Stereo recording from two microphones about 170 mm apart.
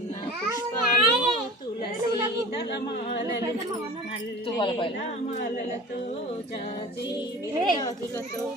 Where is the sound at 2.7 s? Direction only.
80° left.